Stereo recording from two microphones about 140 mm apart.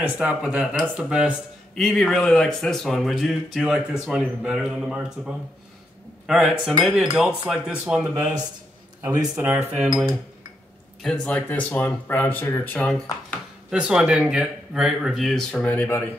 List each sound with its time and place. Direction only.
0.2 s speech: 5° right (ahead or behind)
9.0 s speech: 25° right (ahead or behind)
9.3 s speech: 15° right (ahead or behind)
11.0 s speech: 5° left (ahead or behind)
13.7 s speech: 5° right (ahead or behind); by 16.1 s 15° left (ahead or behind)